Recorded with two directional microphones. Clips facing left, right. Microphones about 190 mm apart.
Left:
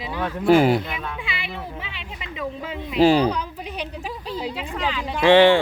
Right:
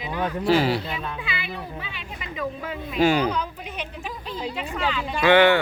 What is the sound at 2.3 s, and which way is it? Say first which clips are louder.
Speech: even; 20° left (ahead or behind).